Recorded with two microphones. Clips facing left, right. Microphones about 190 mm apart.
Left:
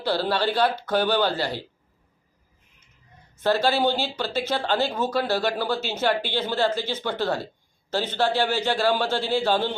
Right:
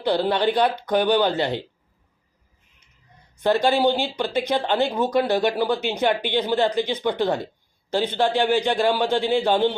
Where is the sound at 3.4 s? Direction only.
15° right (ahead or behind).